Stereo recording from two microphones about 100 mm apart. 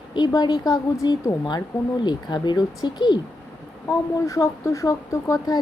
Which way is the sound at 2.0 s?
45° left (ahead or behind).